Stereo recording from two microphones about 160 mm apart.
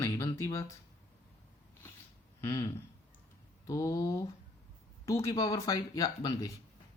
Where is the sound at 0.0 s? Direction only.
20° left (ahead or behind).